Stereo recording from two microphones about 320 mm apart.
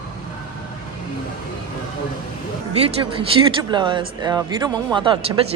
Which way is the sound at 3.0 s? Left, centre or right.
Centre.